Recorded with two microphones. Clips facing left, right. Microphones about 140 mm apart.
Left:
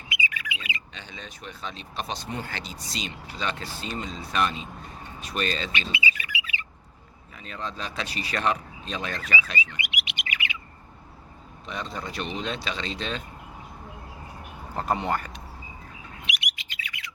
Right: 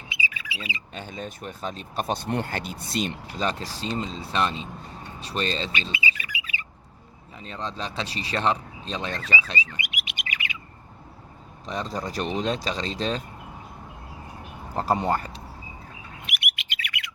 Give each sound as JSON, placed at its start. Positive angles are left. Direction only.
{"t": 0.1, "sound": "squawk", "side_deg": -30}
{"t": 0.9, "sound": "speech", "side_deg": -45}
{"t": 3.4, "sound": "speech", "side_deg": -35}
{"t": 5.7, "sound": "bird", "side_deg": -40}
{"t": 7.3, "sound": "speech", "side_deg": -30}
{"t": 9.8, "sound": "bird", "side_deg": -40}
{"t": 11.6, "sound": "speech", "side_deg": -35}
{"t": 14.8, "sound": "speech", "side_deg": -30}
{"t": 16.2, "sound": "bird", "side_deg": -55}